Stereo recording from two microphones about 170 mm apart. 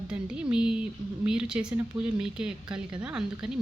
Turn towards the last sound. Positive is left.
turn(degrees=-5)  # may be behind; listen again after turning